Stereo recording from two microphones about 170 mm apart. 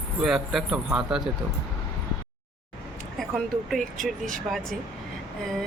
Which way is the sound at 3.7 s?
50° right (ahead or behind).